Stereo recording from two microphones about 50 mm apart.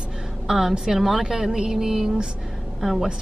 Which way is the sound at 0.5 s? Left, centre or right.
Centre.